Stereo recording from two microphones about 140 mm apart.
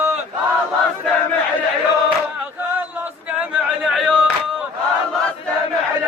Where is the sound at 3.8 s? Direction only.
Centre (ahead or behind).